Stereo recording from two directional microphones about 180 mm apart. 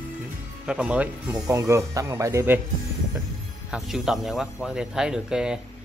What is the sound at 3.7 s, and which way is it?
Speech, centre (ahead or behind).